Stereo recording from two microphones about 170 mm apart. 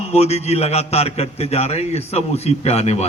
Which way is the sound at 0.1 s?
40° left (ahead or behind).